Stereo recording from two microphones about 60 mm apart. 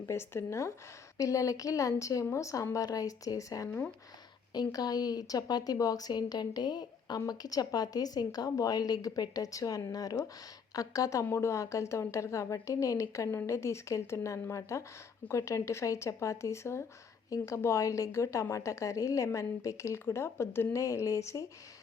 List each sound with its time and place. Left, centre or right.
0.0 s speech: left
1.2 s speech: left
2.7 s speech: left
3.7 s speech: left
4.7 s a woman's voice: left
10.8 s speech: left
11.3 s speech: left
17.2 s speech: left
17.6 s speech: left
20.7 s speech: left